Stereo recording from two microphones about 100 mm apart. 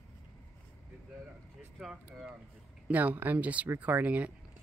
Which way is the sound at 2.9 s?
15° right (ahead or behind).